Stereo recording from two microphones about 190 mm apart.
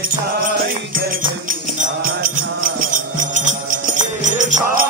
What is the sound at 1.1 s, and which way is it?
Music, 45° right (ahead or behind).